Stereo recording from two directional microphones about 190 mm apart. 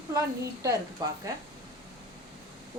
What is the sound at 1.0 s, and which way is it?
Speech, 20° right (ahead or behind).